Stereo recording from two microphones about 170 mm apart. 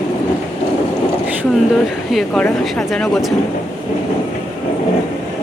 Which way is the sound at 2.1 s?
Centre (ahead or behind).